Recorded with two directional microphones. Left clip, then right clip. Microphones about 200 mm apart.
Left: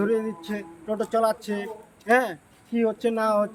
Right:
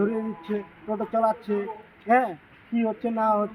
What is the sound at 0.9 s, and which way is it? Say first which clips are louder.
A man's voice: left 1 dB; 25° left (ahead or behind).